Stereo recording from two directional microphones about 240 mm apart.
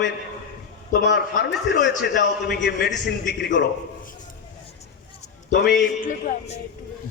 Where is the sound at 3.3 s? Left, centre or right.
Left.